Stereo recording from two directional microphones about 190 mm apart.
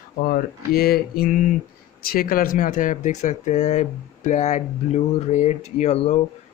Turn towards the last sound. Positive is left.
turn(degrees=35)  # may be behind; listen again after turning